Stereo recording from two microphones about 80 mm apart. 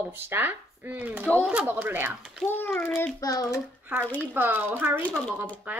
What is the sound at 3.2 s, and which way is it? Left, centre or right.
Speech, left.